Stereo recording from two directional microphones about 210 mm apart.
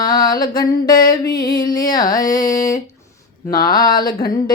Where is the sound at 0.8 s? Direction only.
45° left (ahead or behind).